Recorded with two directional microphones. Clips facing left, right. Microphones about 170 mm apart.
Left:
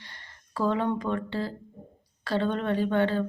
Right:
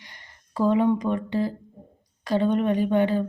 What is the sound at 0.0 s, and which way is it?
Speech, 15° right (ahead or behind).